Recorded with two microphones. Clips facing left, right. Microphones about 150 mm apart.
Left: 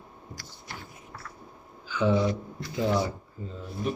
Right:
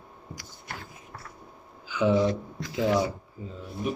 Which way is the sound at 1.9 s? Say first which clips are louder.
Right 1 dB; 15° right (ahead or behind).